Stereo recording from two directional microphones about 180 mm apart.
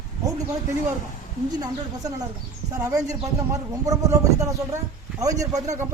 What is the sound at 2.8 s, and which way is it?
A man's voice, 20° right (ahead or behind).